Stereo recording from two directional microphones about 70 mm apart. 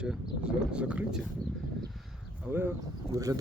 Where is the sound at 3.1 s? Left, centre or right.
Right.